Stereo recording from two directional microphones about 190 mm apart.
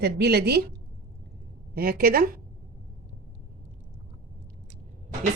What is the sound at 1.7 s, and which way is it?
Speech, 50° right (ahead or behind).